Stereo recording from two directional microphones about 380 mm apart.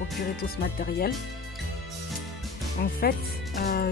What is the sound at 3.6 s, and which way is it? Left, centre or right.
Speech, left.